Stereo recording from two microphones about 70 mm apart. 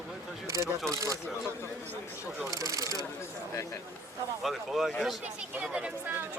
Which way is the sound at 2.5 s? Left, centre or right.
Right.